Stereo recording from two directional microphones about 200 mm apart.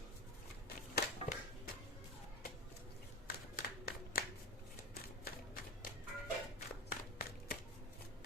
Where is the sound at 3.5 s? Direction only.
45° left (ahead or behind).